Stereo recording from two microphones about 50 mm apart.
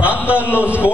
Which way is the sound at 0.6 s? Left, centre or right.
Right.